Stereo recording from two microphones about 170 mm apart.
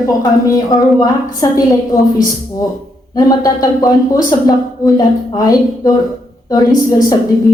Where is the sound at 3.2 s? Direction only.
20° left (ahead or behind).